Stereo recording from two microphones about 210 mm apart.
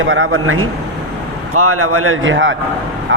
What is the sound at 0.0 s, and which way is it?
A man's voice, 70° right (ahead or behind).